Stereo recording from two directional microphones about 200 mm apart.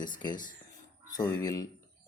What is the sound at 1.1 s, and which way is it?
Speech, 20° left (ahead or behind).